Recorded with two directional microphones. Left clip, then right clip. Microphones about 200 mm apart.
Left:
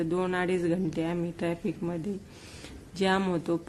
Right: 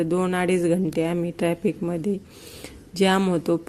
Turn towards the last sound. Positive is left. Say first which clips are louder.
# right 6 dB
turn(degrees=-25)  # may be behind; listen again after turning